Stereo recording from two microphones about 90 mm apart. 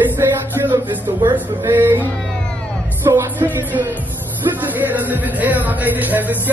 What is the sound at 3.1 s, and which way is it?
Music, 40° right (ahead or behind).